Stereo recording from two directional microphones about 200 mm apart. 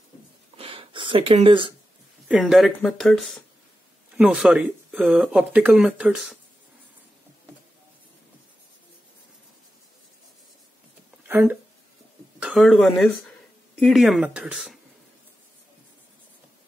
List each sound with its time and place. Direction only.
0.6 s a sound: 25° right (ahead or behind)
2.2 s speech: centre (ahead or behind)
11.2 s speech: 10° right (ahead or behind)